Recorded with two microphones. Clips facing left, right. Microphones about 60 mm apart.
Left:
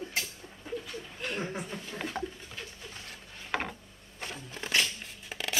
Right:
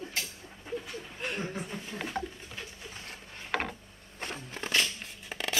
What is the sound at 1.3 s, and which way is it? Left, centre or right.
Chuckle, centre.